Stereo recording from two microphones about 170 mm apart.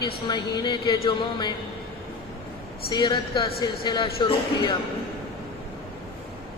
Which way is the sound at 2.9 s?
25° left (ahead or behind).